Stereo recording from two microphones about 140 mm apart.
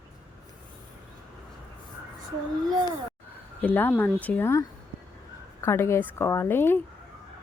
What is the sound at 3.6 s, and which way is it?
A woman's voice, 15° left (ahead or behind).